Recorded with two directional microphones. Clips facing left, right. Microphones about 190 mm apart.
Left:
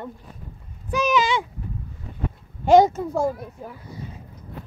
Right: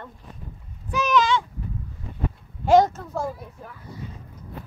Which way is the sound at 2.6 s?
5° right (ahead or behind).